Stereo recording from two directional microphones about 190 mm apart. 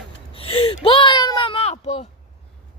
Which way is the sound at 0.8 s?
25° left (ahead or behind).